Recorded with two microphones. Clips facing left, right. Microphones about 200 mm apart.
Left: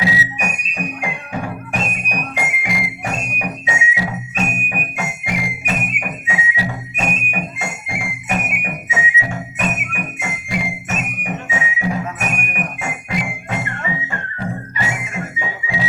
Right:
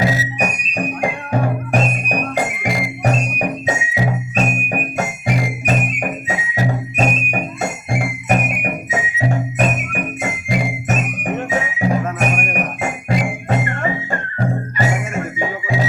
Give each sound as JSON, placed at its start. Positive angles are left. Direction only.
{"t": 0.0, "sound": "music", "side_deg": -45}